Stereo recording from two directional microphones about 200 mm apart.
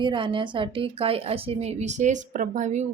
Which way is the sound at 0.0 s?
25° right (ahead or behind).